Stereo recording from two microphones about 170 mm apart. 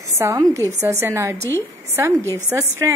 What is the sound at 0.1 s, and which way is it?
Speech, 15° right (ahead or behind).